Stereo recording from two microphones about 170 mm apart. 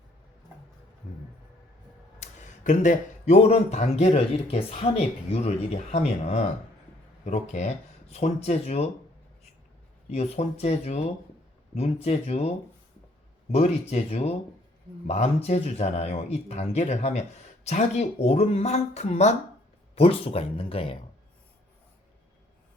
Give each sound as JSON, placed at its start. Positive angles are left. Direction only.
{"t": 1.0, "sound": "music", "side_deg": 50}
{"t": 2.1, "sound": "speech", "side_deg": 45}
{"t": 10.1, "sound": "speech", "side_deg": 40}